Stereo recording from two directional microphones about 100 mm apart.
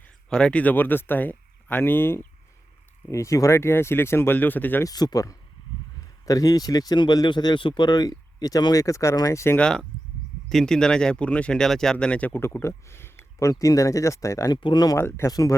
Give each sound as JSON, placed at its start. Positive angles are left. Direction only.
{"t": 0.0, "sound": "speech", "side_deg": 10}
{"t": 4.8, "sound": "speech", "side_deg": 40}
{"t": 9.6, "sound": "speech", "side_deg": 5}
{"t": 12.6, "sound": "speech", "side_deg": 25}
{"t": 14.6, "sound": "speech", "side_deg": 45}
{"t": 14.9, "sound": "speech", "side_deg": 25}
{"t": 15.3, "sound": "speech", "side_deg": 40}